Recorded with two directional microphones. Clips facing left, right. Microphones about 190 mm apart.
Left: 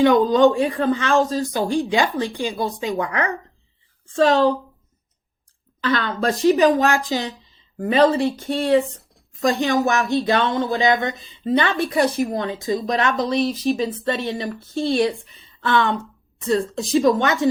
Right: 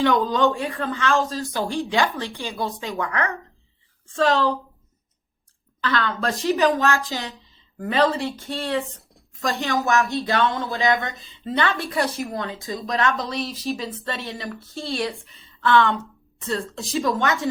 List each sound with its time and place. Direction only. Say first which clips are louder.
0.0 s speech: left 6 dB; 15° left (ahead or behind)
5.8 s speech: left 3 dB; 20° left (ahead or behind)